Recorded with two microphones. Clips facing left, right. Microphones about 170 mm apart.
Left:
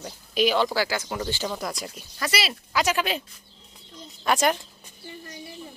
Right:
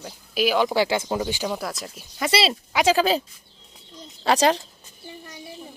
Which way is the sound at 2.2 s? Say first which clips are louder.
Right 6 dB; 30° right (ahead or behind).